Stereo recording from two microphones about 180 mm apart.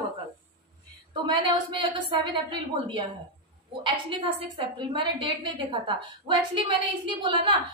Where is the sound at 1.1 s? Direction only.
25° right (ahead or behind).